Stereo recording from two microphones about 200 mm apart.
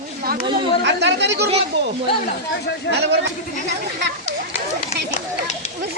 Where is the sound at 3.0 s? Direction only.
55° right (ahead or behind).